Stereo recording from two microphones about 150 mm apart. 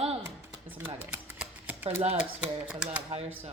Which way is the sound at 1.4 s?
10° right (ahead or behind).